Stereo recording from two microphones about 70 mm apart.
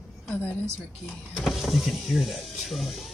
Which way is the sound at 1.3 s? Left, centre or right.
Centre.